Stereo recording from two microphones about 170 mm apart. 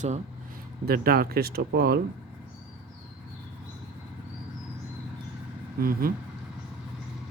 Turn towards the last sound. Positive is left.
turn(degrees=-60)  # may be behind; listen again after turning